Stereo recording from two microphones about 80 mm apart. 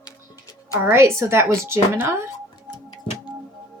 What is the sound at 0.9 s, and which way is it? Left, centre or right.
A woman's voice, right.